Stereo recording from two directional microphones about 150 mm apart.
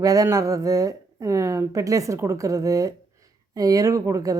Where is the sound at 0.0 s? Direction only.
20° right (ahead or behind).